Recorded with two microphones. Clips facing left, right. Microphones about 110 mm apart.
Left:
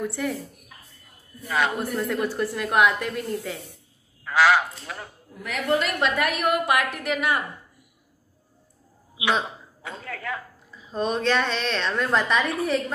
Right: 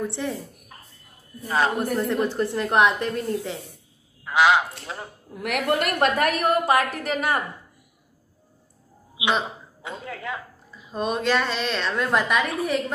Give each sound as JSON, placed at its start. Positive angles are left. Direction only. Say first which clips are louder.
{"t": 0.0, "sound": "a woman's voice", "louder": "even", "side_deg": -25}
{"t": 2.0, "sound": "a woman's voice", "louder": "right 2 dB", "side_deg": -25}
{"t": 5.3, "sound": "a woman's voice", "louder": "right 1 dB", "side_deg": -65}
{"t": 9.2, "sound": "a woman's voice", "louder": "even", "side_deg": -20}
{"t": 10.7, "sound": "a woman's voice", "louder": "even", "side_deg": -5}